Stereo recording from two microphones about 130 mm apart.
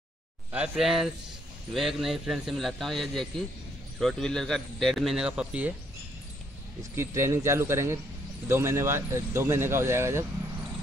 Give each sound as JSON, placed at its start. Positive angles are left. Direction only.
{"t": 0.5, "sound": "speech", "side_deg": -5}
{"t": 6.8, "sound": "speech", "side_deg": -20}